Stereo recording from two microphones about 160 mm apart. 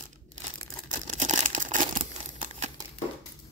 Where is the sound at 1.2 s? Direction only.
45° right (ahead or behind).